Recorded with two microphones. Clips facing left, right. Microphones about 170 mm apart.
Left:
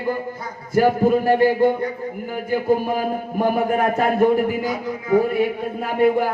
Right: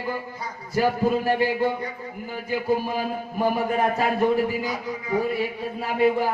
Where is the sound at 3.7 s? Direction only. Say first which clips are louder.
Left 4 dB; 50° left (ahead or behind).